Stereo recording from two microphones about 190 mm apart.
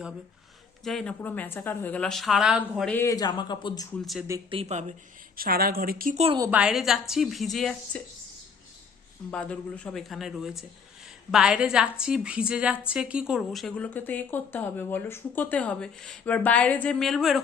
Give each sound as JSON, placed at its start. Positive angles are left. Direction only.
{"t": 0.9, "sound": "a woman's voice", "side_deg": 5}
{"t": 2.9, "sound": "speech", "side_deg": 15}
{"t": 4.0, "sound": "a woman's voice", "side_deg": 0}
{"t": 4.5, "sound": "speech", "side_deg": -35}
{"t": 5.4, "sound": "a woman's voice", "side_deg": -50}
{"t": 6.1, "sound": "speech", "side_deg": -30}
{"t": 6.4, "sound": "a woman's voice", "side_deg": -5}
{"t": 9.3, "sound": "a woman's voice", "side_deg": 5}